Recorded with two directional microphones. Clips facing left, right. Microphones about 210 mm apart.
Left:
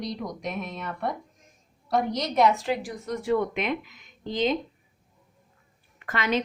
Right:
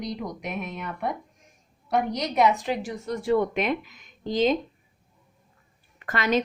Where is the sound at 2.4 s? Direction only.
15° right (ahead or behind).